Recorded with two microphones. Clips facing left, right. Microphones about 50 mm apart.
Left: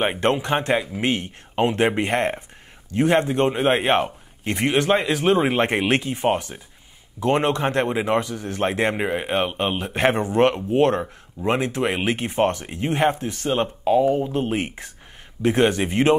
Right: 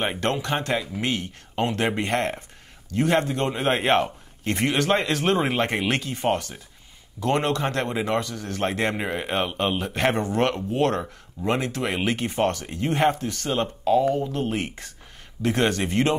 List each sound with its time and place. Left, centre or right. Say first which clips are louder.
0.0 s speech: left 4 dB; left
5.6 s speech: left 4 dB; left